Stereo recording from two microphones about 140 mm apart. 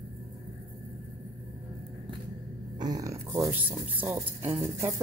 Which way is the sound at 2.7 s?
25° right (ahead or behind).